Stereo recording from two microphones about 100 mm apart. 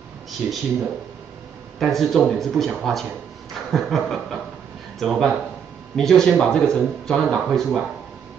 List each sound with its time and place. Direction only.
0.4 s speech: 15° right (ahead or behind)
1.8 s speech: centre (ahead or behind)
3.5 s chuckle: centre (ahead or behind)
4.9 s speech: centre (ahead or behind)